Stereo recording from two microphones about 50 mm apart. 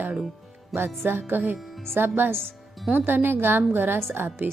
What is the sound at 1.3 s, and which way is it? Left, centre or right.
Speech, right.